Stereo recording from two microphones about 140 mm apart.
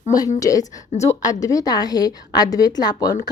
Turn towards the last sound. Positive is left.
turn(degrees=30)  # may be behind; listen again after turning